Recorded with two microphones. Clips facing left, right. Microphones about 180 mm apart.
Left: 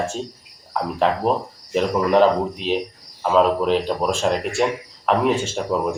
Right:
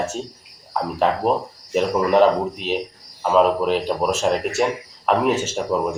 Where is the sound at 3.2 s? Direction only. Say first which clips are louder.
Even; 5° right (ahead or behind).